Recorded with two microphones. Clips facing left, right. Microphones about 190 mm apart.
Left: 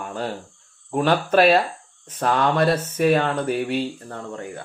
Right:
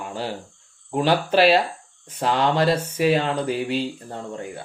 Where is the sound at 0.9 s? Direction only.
55° left (ahead or behind).